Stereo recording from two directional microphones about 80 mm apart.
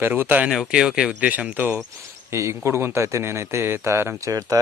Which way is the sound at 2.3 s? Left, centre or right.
Right.